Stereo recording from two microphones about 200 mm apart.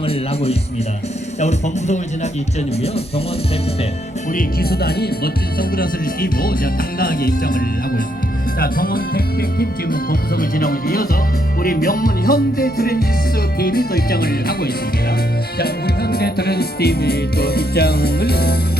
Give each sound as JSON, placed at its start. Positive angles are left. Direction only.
{"t": 0.0, "sound": "music", "side_deg": 30}
{"t": 1.4, "sound": "speech", "side_deg": 35}
{"t": 4.4, "sound": "music", "side_deg": 50}